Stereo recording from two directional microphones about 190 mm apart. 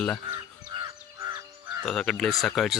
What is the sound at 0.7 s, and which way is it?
Bird, 25° right (ahead or behind).